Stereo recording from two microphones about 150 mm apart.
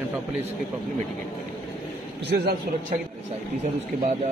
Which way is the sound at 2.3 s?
90° right.